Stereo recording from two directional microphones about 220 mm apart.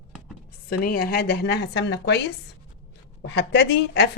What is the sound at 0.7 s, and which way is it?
A woman's voice, 40° left (ahead or behind).